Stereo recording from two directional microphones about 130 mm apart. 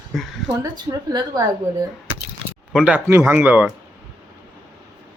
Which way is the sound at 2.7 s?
5° right (ahead or behind).